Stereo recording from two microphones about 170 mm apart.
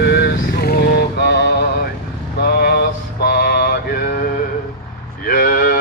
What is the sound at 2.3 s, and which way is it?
Mantra, 70° left (ahead or behind).